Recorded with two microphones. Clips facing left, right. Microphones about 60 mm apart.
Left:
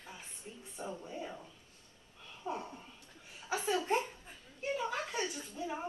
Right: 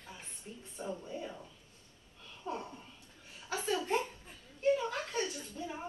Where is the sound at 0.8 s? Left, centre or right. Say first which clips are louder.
Right 2 dB; centre.